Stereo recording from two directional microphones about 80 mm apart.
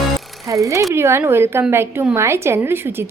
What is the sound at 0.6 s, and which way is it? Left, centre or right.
A woman's voice, right.